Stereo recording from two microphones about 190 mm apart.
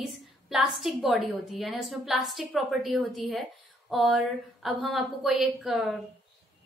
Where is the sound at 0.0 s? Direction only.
Centre (ahead or behind).